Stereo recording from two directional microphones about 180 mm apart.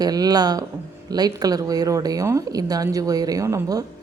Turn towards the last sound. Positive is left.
turn(degrees=-20)  # may be behind; listen again after turning